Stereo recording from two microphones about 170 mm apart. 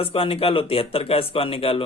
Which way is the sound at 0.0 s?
35° left (ahead or behind).